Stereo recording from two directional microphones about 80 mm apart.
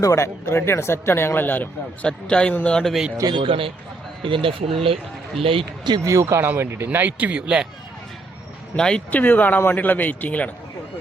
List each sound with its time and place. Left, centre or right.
0.0 s speech: left
2.0 s a man's voice: centre
3.2 s speech: right
5.5 s speech: right
6.1 s speech: right; by 7.7 s centre
8.7 s speech: centre
9.0 s speech: left